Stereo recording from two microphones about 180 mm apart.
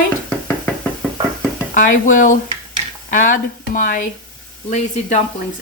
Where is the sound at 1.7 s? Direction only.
45° left (ahead or behind).